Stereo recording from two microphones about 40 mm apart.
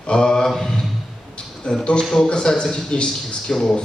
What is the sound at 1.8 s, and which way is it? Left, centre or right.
A man's voice, left.